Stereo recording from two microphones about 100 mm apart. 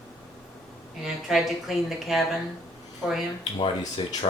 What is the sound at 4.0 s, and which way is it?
Speech, 55° left (ahead or behind).